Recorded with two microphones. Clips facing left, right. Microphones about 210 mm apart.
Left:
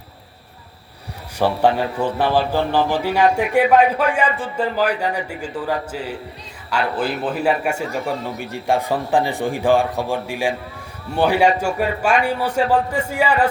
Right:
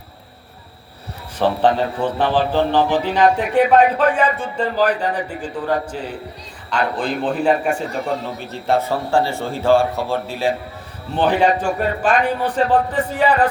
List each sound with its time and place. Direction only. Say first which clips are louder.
1.4 s a man's voice: right 1 dB; 10° left (ahead or behind)